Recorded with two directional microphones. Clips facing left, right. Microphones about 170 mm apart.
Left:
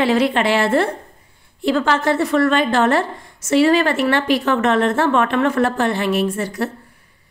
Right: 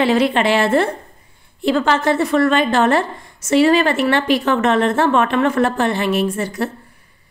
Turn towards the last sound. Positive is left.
turn(degrees=-20)  # may be behind; listen again after turning